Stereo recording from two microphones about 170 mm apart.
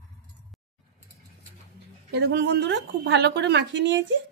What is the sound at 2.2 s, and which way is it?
Speech, 70° right (ahead or behind).